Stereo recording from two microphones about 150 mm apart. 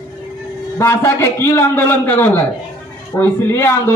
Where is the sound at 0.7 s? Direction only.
15° left (ahead or behind).